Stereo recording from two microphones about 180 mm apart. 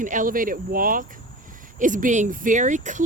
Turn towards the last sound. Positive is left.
turn(degrees=-45)  # may be behind; listen again after turning